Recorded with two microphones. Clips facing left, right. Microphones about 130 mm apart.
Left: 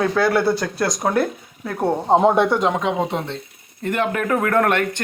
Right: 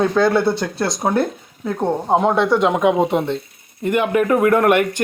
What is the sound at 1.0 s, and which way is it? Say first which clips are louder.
Speech: right 2 dB; 15° right (ahead or behind).